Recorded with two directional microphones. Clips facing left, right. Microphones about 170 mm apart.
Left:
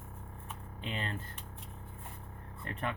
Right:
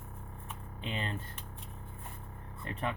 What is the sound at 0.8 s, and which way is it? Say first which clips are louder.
Speech: right 1 dB; 20° right (ahead or behind).